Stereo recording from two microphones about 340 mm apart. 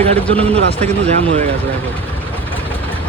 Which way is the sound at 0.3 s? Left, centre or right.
Centre.